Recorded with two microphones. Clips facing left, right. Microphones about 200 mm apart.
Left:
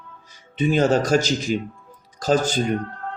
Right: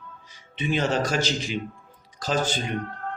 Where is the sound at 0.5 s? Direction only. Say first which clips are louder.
Left 6 dB; 45° left (ahead or behind).